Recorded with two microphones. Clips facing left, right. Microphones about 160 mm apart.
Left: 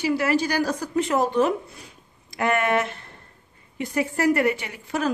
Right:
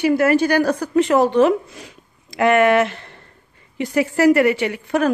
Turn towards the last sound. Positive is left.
turn(degrees=-65)  # may be behind; listen again after turning